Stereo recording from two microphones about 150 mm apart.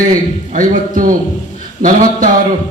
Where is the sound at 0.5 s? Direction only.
60° right (ahead or behind).